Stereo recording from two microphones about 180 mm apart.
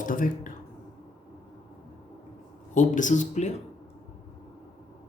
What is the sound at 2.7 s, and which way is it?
Speech, 45° left (ahead or behind).